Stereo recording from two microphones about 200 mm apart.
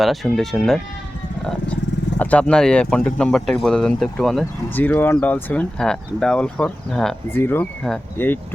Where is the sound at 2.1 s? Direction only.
5° left (ahead or behind).